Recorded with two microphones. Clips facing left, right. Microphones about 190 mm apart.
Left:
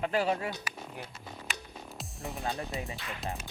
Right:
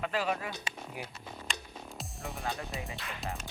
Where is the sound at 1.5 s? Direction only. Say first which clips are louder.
Right 1 dB; 5° left (ahead or behind).